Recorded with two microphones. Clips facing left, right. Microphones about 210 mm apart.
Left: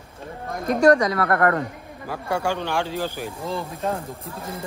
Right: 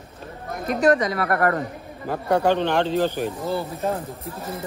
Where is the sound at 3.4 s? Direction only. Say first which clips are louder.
Right 2 dB; 30° right (ahead or behind).